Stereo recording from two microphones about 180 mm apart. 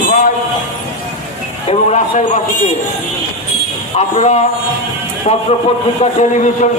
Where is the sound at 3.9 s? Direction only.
40° left (ahead or behind).